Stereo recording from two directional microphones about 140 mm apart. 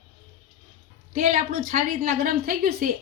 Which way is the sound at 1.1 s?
65° right (ahead or behind).